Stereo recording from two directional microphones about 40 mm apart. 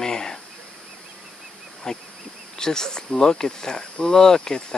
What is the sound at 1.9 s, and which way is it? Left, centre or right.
Speech, centre.